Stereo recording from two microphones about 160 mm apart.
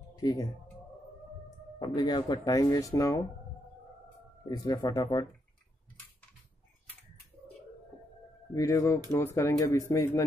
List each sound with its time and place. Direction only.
0.1 s speech: 25° left (ahead or behind)
1.8 s speech: 25° left (ahead or behind)
4.5 s speech: 25° left (ahead or behind)
8.5 s speech: 20° left (ahead or behind)